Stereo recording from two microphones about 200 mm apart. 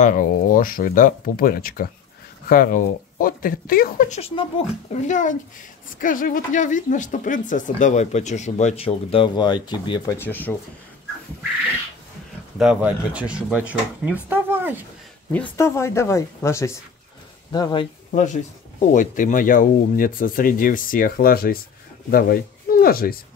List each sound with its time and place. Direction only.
0.0 s speech: 40° left (ahead or behind)
4.2 s speech: 30° left (ahead or behind)
5.1 s speech: 40° left (ahead or behind); by 10.5 s 10° left (ahead or behind)
12.5 s speech: 5° right (ahead or behind)
15.3 s speech: 10° left (ahead or behind)
18.1 s speech: 35° left (ahead or behind)